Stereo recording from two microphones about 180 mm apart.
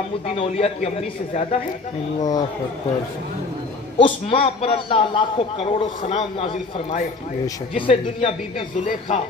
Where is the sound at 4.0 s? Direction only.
30° left (ahead or behind).